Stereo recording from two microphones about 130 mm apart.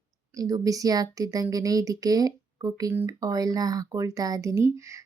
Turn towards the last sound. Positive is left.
turn(degrees=-20)  # may be behind; listen again after turning